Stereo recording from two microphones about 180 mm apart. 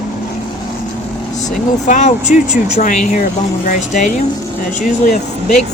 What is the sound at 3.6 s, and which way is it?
Speech, 45° left (ahead or behind).